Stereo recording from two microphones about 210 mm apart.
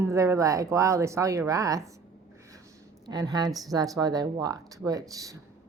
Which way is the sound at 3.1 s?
20° right (ahead or behind).